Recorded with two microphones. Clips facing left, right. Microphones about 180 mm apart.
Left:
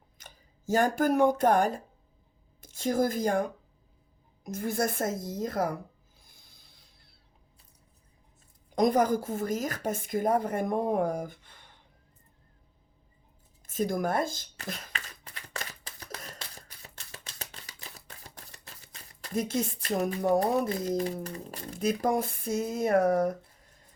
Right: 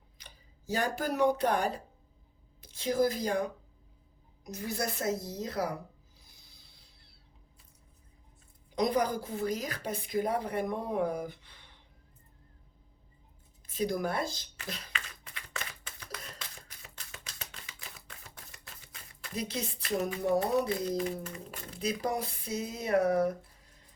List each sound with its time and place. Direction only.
0.2 s a woman's voice: 50° left (ahead or behind)
6.1 s mechanisms: 50° left (ahead or behind)
8.7 s a woman's voice: 50° left (ahead or behind)
13.7 s a sound: 50° left (ahead or behind)